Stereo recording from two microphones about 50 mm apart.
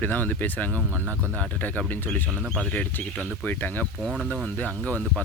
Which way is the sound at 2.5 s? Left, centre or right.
Centre.